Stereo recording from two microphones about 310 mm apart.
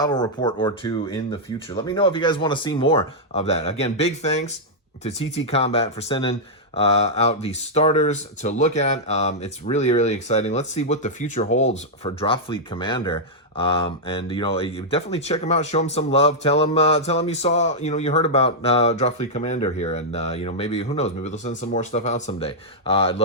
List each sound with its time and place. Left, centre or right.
0.0 s speech: centre